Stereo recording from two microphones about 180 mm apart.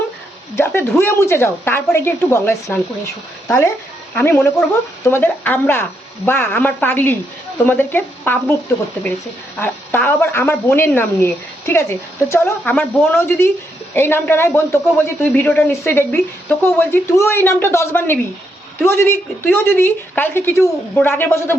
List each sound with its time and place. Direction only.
0.5 s a woman's voice: 15° left (ahead or behind)